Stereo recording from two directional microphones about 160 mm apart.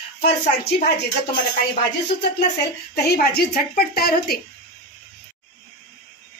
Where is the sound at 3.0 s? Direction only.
75° left (ahead or behind).